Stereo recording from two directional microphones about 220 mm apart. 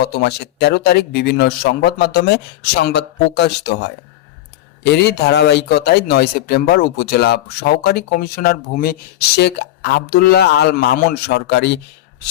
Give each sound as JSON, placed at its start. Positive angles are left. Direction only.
{"t": 0.0, "sound": "a man's voice", "side_deg": 45}